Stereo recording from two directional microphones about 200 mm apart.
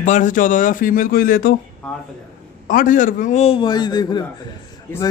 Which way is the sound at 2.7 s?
40° left (ahead or behind).